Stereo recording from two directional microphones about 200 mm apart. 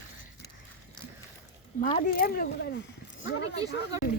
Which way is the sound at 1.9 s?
45° left (ahead or behind).